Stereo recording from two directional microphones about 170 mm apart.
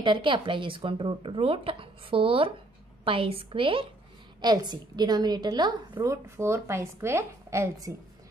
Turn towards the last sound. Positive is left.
turn(degrees=-15)  # may be behind; listen again after turning